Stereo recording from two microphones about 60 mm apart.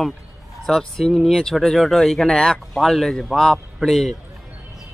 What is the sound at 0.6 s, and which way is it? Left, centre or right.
A man's voice, centre.